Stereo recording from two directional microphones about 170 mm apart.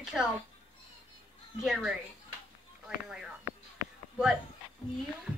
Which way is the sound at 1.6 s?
Centre (ahead or behind).